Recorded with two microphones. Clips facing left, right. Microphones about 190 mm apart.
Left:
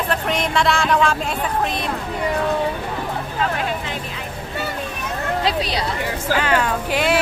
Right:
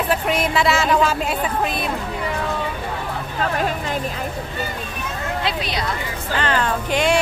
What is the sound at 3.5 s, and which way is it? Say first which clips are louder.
Music: right 2 dB; 45° right (ahead or behind).